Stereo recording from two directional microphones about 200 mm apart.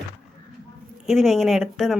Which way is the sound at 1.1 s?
Centre (ahead or behind).